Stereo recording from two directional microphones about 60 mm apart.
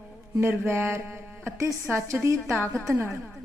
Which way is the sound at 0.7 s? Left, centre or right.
Right.